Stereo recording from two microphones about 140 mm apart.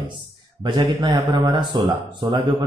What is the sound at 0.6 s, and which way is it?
Speech, 30° right (ahead or behind).